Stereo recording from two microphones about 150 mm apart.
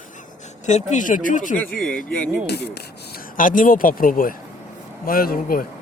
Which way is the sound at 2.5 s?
90° left.